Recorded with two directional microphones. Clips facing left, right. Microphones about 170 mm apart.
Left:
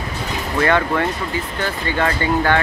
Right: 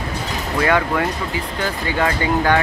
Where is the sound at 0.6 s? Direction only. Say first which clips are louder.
Left 1 dB; 10° right (ahead or behind).